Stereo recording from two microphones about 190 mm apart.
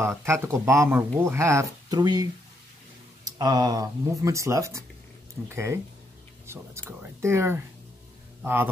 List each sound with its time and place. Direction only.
0.0 s speech: 15° right (ahead or behind)
3.3 s speech: 20° right (ahead or behind)
6.4 s a sound: 15° right (ahead or behind)
7.2 s speech: 15° right (ahead or behind)